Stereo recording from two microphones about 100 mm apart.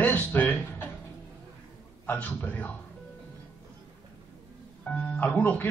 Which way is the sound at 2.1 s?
20° left (ahead or behind).